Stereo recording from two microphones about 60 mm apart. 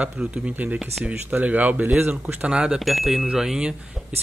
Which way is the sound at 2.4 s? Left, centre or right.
Centre.